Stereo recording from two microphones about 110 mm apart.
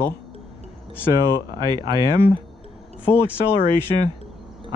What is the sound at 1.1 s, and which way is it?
Speech, 40° right (ahead or behind).